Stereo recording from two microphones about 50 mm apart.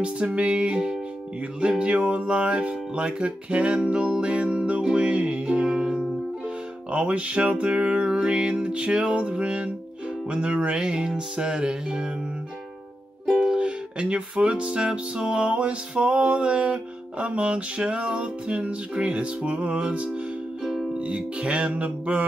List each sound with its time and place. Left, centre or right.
0.0 s music: right
13.4 s music: centre
20.6 s music: centre
21.0 s music: right